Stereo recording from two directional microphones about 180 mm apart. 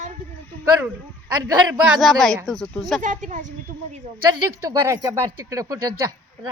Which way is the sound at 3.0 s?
45° right (ahead or behind).